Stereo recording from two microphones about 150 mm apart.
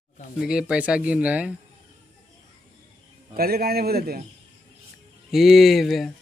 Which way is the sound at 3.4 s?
90° right.